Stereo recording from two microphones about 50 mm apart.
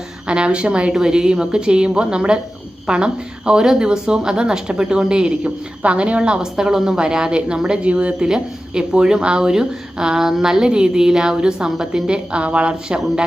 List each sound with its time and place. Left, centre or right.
0.3 s a woman's voice: centre